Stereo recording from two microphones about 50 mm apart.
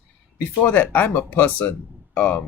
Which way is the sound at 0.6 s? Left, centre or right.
Left.